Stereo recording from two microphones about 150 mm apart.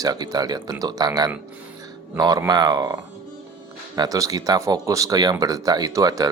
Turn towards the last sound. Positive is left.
turn(degrees=-25)  # may be behind; listen again after turning